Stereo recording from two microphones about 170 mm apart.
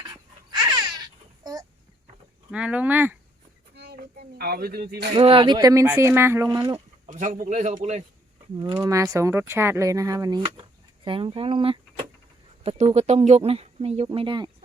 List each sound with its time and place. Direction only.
0.0 s a sound: 25° right (ahead or behind)
2.5 s speech: 10° right (ahead or behind)
3.8 s a sound: 65° right (ahead or behind)
5.1 s speech: 30° right (ahead or behind)
7.1 s a man's voice: 50° right (ahead or behind)
8.5 s speech: 25° right (ahead or behind)